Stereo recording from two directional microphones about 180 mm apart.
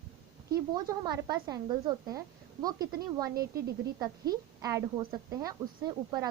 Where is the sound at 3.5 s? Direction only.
20° right (ahead or behind).